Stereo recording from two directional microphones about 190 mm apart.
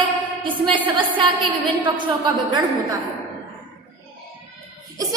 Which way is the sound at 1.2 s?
25° right (ahead or behind).